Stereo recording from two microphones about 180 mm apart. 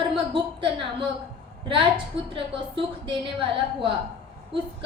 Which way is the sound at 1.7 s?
30° right (ahead or behind).